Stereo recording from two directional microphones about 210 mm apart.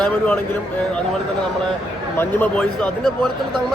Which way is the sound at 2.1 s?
5° left (ahead or behind).